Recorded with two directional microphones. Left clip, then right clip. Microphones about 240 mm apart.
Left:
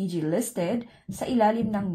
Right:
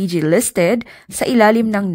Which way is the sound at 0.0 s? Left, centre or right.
Right.